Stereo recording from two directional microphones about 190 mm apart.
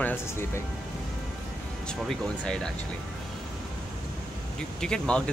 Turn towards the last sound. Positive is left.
turn(degrees=5)  # may be behind; listen again after turning